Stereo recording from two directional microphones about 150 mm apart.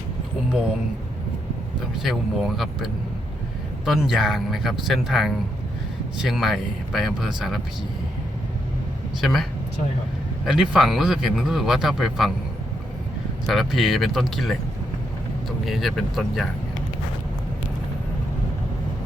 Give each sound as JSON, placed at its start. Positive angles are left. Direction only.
{"t": 2.0, "sound": "speech", "side_deg": 0}
{"t": 9.2, "sound": "speech", "side_deg": 0}
{"t": 13.5, "sound": "speech", "side_deg": 0}